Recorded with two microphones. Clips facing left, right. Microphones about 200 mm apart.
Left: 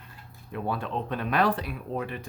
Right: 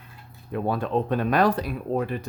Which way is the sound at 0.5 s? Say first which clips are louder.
Right 6 dB; 45° right (ahead or behind).